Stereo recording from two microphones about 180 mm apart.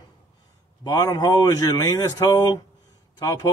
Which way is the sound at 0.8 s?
20° left (ahead or behind).